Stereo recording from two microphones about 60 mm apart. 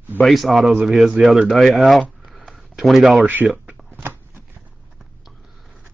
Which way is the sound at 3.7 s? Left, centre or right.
Right.